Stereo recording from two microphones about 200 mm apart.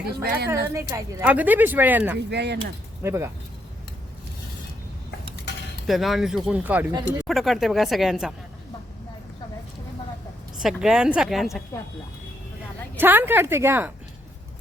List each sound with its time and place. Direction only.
0.1 s a woman's voice: 50° right (ahead or behind)
0.5 s a woman's voice: 15° right (ahead or behind)
2.1 s speech: 55° right (ahead or behind)
3.0 s a woman's voice: 15° right (ahead or behind)
5.8 s speech: centre (ahead or behind)
10.6 s speech: centre (ahead or behind)
13.0 s a woman's voice: 10° right (ahead or behind)